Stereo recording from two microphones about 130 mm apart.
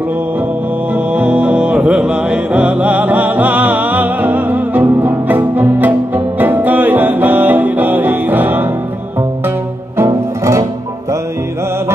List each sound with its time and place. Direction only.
0.9 s music: 10° right (ahead or behind)
9.9 s music: 25° right (ahead or behind)